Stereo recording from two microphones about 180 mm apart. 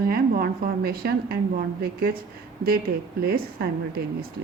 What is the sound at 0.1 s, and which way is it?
A woman's voice, 55° right (ahead or behind).